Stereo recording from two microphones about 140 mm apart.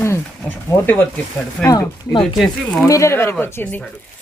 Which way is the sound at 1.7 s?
25° left (ahead or behind).